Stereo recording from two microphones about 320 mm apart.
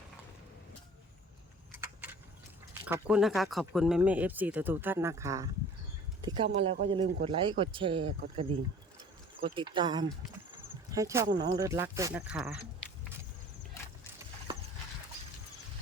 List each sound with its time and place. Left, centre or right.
2.8 s speech: centre